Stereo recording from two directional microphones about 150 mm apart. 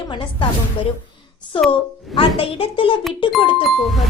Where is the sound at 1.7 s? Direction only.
35° left (ahead or behind).